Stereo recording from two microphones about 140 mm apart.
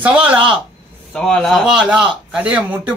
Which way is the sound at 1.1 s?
5° left (ahead or behind).